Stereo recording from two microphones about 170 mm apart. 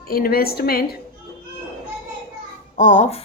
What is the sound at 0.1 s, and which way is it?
Speech, 60° left (ahead or behind).